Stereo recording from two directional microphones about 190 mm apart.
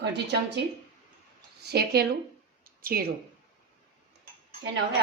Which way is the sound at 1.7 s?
55° right (ahead or behind).